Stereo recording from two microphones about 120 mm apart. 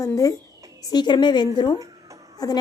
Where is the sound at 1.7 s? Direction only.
25° right (ahead or behind).